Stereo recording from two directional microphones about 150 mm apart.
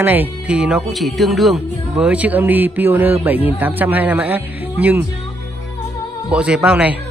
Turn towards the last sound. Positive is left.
turn(degrees=-5)  # may be behind; listen again after turning